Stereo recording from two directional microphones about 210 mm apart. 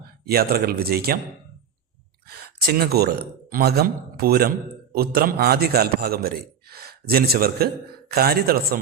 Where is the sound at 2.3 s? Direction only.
45° right (ahead or behind).